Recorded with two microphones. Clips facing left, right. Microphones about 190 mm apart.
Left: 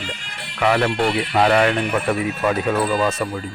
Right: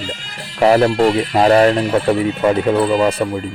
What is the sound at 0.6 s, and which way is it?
Speech, 35° right (ahead or behind).